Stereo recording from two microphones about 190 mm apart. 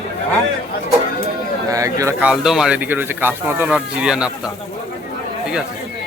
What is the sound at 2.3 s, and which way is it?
Speech, centre (ahead or behind).